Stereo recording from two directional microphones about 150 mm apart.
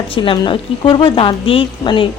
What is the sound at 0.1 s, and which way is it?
A woman's voice, 35° left (ahead or behind).